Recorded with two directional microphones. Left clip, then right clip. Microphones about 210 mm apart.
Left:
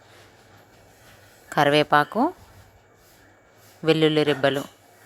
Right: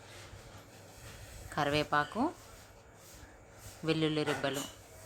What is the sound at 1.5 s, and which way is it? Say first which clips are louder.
Speech: left 13 dB; 35° left (ahead or behind).